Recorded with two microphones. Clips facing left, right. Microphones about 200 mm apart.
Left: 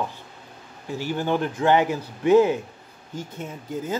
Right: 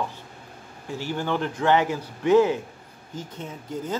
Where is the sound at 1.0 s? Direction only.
15° left (ahead or behind).